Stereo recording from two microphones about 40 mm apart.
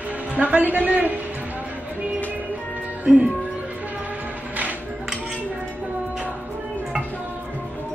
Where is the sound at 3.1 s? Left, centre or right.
Centre.